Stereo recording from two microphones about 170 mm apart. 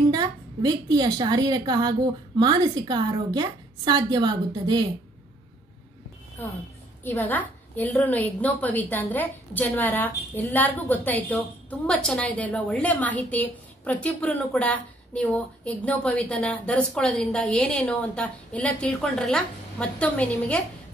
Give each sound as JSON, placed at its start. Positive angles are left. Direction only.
{"t": 0.1, "sound": "a woman's voice", "side_deg": -25}
{"t": 7.0, "sound": "a woman's voice", "side_deg": 10}